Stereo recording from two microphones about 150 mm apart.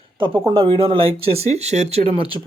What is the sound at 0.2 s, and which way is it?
Speech, 35° right (ahead or behind).